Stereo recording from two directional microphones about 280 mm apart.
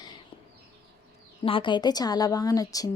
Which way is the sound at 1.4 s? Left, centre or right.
Centre.